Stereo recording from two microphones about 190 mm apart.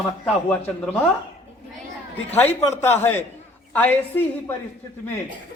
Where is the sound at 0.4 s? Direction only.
10° left (ahead or behind).